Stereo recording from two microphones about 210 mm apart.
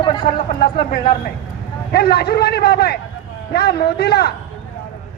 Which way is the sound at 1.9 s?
50° left (ahead or behind).